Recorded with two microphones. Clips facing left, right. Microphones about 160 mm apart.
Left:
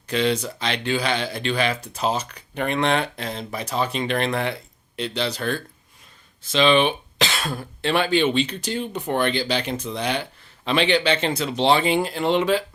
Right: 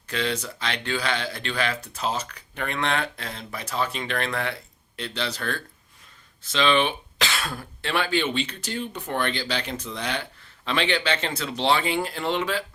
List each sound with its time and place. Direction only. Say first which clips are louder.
0.1 s speech: left 6 dB; 20° left (ahead or behind)